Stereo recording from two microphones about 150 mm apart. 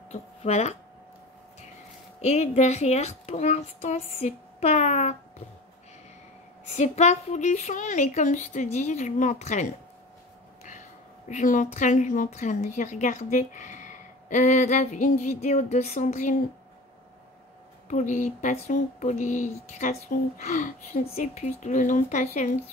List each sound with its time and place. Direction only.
0.1 s speech: 45° left (ahead or behind)
2.2 s a woman's voice: 45° left (ahead or behind)
6.7 s a woman's voice: 50° left (ahead or behind)
11.2 s a woman's voice: 55° left (ahead or behind)
17.8 s a woman's voice: 55° left (ahead or behind)
21.0 s a woman's voice: 45° left (ahead or behind)